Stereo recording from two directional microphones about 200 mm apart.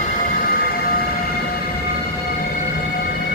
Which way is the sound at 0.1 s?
45° left (ahead or behind).